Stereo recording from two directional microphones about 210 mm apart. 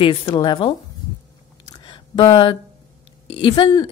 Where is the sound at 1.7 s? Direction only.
25° left (ahead or behind).